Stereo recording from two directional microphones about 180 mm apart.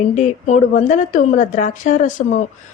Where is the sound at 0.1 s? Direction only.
40° left (ahead or behind).